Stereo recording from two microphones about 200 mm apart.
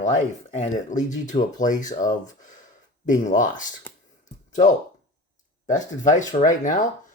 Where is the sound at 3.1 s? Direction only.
40° left (ahead or behind).